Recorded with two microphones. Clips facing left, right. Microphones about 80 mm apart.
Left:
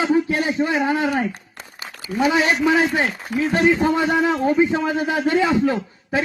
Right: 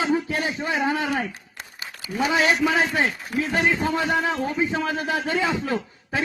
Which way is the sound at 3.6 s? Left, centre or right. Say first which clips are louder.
Left 6 dB; left.